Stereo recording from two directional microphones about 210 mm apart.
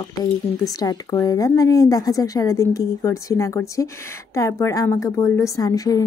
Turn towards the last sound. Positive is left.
turn(degrees=15)  # may be behind; listen again after turning